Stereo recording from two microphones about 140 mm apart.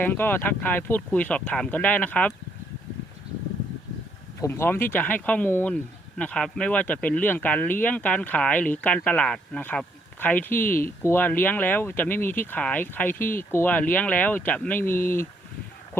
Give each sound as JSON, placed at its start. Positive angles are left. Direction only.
{"t": 0.0, "sound": "speech", "side_deg": 15}
{"t": 4.4, "sound": "speech", "side_deg": 20}